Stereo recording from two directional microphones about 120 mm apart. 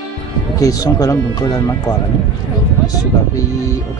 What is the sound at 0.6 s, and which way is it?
Speech, 30° left (ahead or behind).